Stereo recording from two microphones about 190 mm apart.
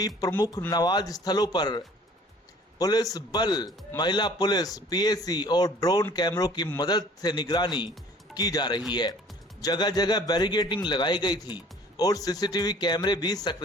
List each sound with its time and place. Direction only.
0.2 s a man's voice: 20° left (ahead or behind)